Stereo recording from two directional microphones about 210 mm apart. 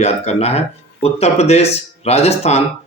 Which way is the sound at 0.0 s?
30° left (ahead or behind).